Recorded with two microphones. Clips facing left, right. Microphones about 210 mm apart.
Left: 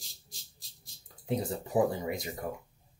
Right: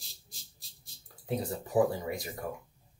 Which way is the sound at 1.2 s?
20° left (ahead or behind).